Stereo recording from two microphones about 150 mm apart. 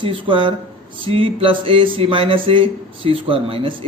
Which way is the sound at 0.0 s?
35° right (ahead or behind).